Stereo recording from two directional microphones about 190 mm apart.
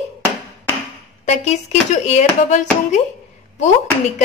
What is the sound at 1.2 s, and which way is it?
Speech, 35° left (ahead or behind).